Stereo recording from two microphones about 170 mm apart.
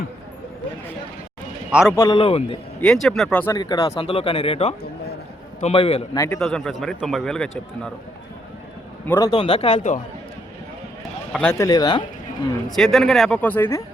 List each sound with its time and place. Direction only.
2.0 s speech: 25° left (ahead or behind)
2.8 s a man's voice: 5° left (ahead or behind)
3.5 s speech: 25° left (ahead or behind)
6.1 s a man's voice: 15° left (ahead or behind)
6.4 s a man's voice: centre (ahead or behind)
9.0 s speech: 20° left (ahead or behind)
9.4 s speech: 35° left (ahead or behind)
11.3 s speech: 5° left (ahead or behind)
11.5 s speech: 20° left (ahead or behind)
12.7 s a man's voice: centre (ahead or behind)